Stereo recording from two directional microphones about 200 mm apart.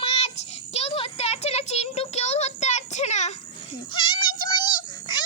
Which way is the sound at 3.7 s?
25° left (ahead or behind).